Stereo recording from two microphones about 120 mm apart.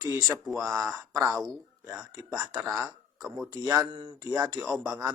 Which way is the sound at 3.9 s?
50° right (ahead or behind).